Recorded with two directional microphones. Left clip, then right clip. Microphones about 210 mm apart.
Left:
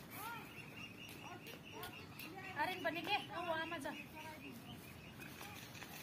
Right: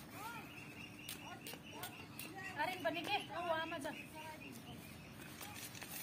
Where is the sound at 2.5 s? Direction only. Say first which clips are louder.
Even; 25° left (ahead or behind).